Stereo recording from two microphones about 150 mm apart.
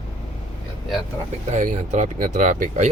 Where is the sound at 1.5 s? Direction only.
55° right (ahead or behind).